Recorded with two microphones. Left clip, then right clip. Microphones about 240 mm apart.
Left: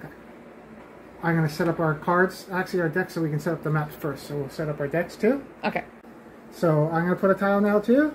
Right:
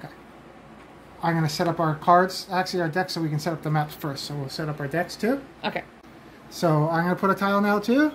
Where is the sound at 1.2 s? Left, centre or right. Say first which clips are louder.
Right 1 dB; right.